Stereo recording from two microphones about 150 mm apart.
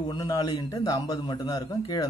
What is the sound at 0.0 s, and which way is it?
Speech, 30° left (ahead or behind).